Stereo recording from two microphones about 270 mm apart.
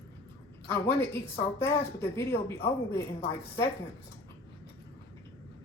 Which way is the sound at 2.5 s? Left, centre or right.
Left.